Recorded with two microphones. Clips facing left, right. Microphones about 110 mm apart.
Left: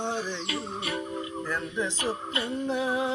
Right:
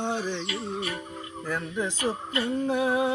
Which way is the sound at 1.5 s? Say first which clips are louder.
Right 3 dB; 10° right (ahead or behind).